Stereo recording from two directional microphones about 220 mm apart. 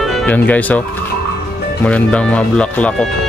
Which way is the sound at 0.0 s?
5° left (ahead or behind).